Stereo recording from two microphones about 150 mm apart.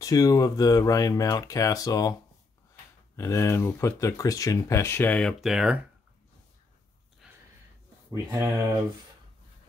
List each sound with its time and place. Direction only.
0.0 s speech: 25° left (ahead or behind)
5.4 s speech: 5° right (ahead or behind)
7.2 s a sound: 5° right (ahead or behind)
8.1 s speech: 20° right (ahead or behind)